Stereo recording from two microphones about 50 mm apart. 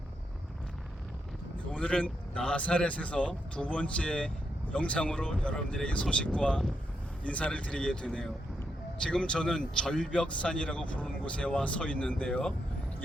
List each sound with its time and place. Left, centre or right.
1.7 s speech: left